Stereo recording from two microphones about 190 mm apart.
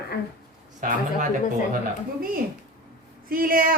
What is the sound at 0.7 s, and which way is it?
Speech, 40° right (ahead or behind).